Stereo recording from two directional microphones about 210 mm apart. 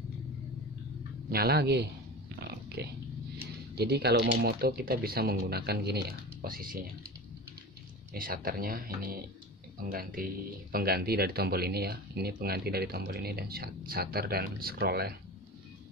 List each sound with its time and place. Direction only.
1.3 s speech: 45° right (ahead or behind)
2.4 s pig: 50° right (ahead or behind)
3.7 s speech: 50° right (ahead or behind)
8.1 s speech: 40° right (ahead or behind)